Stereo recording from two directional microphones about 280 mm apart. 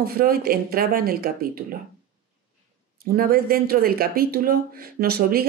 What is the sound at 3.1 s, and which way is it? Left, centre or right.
Speech, right.